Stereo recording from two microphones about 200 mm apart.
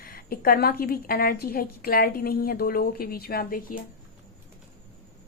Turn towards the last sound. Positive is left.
turn(degrees=45)  # may be behind; listen again after turning